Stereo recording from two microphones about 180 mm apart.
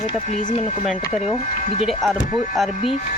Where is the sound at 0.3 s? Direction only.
40° left (ahead or behind).